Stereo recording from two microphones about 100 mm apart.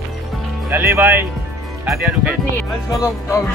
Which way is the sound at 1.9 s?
10° right (ahead or behind).